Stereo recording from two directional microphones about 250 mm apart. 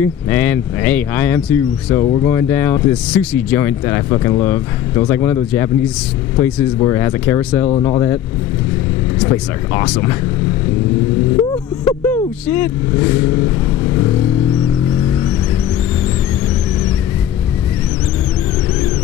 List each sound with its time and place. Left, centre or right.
0.0 s speech: centre
7.6 s speech: left
9.2 s speech: centre
11.8 s a sound: centre